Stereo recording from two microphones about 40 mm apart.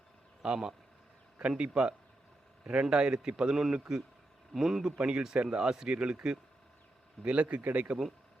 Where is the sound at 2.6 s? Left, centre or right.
Right; by 4.8 s centre.